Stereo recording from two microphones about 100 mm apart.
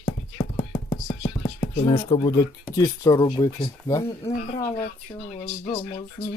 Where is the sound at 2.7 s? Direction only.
40° left (ahead or behind).